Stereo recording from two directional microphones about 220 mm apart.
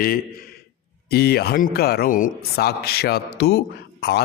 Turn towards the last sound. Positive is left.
turn(degrees=50)  # may be behind; listen again after turning